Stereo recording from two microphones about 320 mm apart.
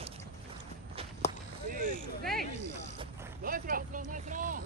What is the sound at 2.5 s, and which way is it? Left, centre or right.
Mechanisms, left.